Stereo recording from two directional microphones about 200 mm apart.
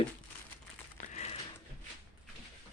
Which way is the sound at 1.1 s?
35° left (ahead or behind).